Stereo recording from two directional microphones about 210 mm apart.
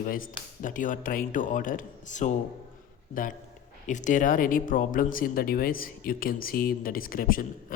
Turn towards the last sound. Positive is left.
turn(degrees=40)  # may be behind; listen again after turning